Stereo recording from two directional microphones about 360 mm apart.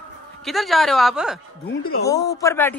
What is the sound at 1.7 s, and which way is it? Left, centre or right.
Speech, left.